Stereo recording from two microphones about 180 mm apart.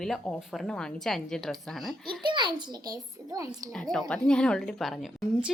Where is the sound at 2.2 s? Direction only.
25° right (ahead or behind).